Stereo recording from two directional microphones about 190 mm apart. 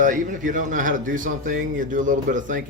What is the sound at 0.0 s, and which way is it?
A man's voice, 45° right (ahead or behind).